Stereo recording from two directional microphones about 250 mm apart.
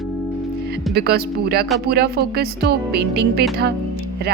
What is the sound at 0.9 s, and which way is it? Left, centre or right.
Speech, right.